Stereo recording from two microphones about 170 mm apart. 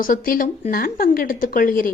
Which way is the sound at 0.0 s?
55° left (ahead or behind).